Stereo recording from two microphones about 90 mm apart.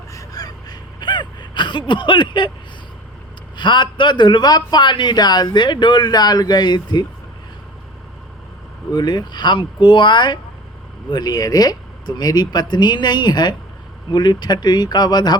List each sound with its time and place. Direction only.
0.1 s gasp: 40° left (ahead or behind); by 2.5 s 60° left (ahead or behind)
3.6 s a man's voice: 60° left (ahead or behind)
8.9 s a man's voice: 50° left (ahead or behind)
11.1 s speech: 45° left (ahead or behind)